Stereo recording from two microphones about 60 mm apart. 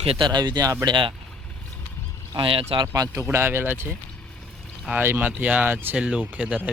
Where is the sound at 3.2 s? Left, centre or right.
Right.